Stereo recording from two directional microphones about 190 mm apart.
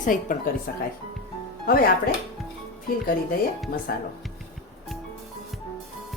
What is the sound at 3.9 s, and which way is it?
Speech, 55° left (ahead or behind).